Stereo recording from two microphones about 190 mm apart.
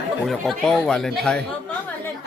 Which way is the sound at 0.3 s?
Centre (ahead or behind).